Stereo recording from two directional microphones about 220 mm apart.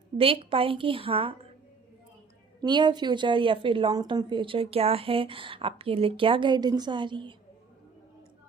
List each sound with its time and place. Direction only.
0.2 s a woman's voice: 25° right (ahead or behind)
2.6 s a woman's voice: 20° right (ahead or behind)